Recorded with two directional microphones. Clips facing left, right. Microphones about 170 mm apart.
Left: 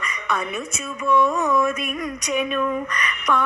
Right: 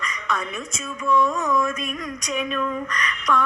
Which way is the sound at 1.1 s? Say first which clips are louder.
Left 2 dB; 60° left (ahead or behind).